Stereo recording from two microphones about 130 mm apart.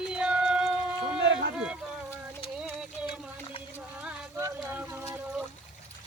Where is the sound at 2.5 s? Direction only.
10° right (ahead or behind).